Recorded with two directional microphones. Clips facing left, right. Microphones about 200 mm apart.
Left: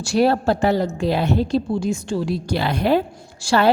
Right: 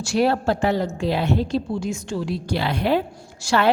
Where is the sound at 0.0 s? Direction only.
35° left (ahead or behind).